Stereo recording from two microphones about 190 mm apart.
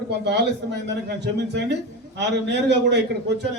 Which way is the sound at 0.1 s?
65° right (ahead or behind).